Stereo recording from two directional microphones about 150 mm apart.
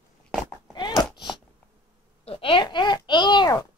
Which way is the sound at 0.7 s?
30° left (ahead or behind).